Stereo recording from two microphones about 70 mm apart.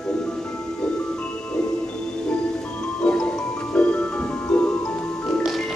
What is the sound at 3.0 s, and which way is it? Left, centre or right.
Music, centre.